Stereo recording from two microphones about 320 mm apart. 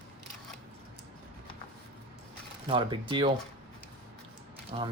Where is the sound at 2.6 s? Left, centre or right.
Centre.